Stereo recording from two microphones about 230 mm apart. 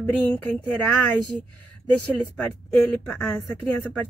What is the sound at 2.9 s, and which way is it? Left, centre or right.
Speech, centre.